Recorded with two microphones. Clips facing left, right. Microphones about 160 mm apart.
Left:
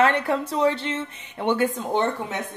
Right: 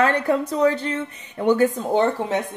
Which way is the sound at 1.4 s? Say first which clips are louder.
Right 5 dB; 40° right (ahead or behind).